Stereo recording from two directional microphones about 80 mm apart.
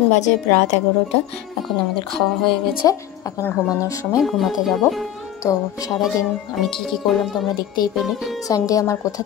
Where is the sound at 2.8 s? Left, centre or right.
Left.